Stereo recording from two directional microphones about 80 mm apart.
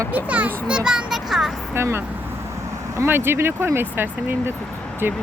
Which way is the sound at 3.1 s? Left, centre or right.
Right.